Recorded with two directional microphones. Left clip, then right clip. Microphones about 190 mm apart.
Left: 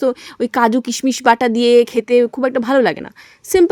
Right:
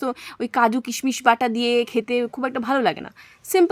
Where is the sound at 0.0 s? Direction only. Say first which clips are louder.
Left 9 dB; 15° left (ahead or behind).